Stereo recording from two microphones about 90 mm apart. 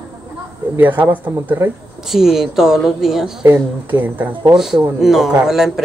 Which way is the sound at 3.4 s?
25° right (ahead or behind).